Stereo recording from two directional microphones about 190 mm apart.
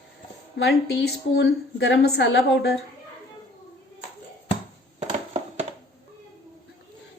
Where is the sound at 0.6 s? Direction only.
60° left (ahead or behind).